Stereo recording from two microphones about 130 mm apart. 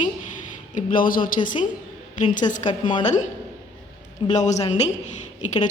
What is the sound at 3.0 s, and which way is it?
Speech, 65° left (ahead or behind).